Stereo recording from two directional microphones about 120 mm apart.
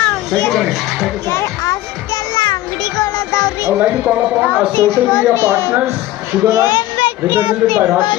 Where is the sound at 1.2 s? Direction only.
25° left (ahead or behind).